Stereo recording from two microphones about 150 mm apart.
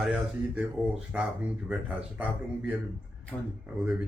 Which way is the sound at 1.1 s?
10° right (ahead or behind).